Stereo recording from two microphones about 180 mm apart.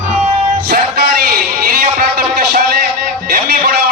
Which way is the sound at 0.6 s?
60° right (ahead or behind).